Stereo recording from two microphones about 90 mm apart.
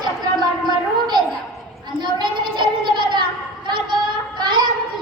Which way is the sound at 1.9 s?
60° right (ahead or behind).